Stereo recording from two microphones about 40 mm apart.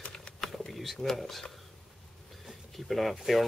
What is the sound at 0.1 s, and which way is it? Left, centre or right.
Typing, centre.